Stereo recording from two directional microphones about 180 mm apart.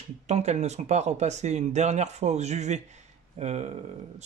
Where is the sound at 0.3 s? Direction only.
40° right (ahead or behind).